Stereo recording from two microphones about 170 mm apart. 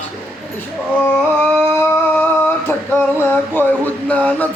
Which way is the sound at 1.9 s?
10° left (ahead or behind).